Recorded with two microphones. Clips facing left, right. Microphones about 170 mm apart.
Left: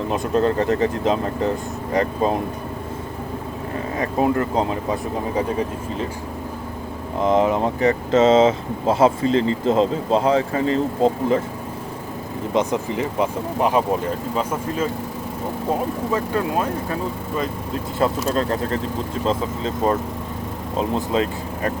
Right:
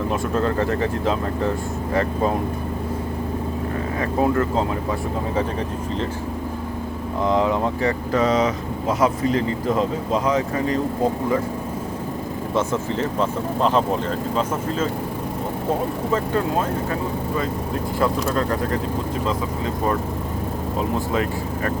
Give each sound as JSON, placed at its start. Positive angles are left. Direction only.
{"t": 0.1, "sound": "speech", "side_deg": 20}
{"t": 3.9, "sound": "speech", "side_deg": 20}
{"t": 7.2, "sound": "speech", "side_deg": 20}
{"t": 12.5, "sound": "speech", "side_deg": 15}
{"t": 19.3, "sound": "speech", "side_deg": 25}